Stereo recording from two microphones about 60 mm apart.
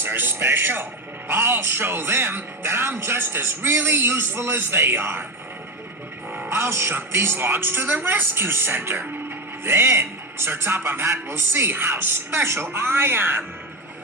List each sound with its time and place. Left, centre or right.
0.0 s speech: right
6.5 s speech: right